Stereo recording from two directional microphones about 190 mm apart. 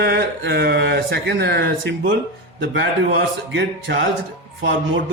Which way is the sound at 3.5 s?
75° right (ahead or behind).